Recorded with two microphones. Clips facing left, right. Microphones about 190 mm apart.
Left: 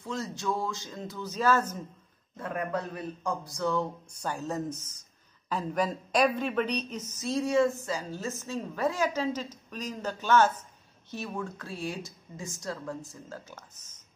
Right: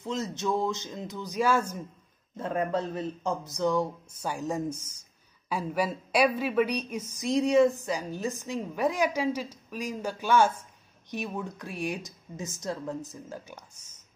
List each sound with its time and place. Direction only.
0.0 s speech: 20° right (ahead or behind)
2.3 s a woman's voice: 25° right (ahead or behind)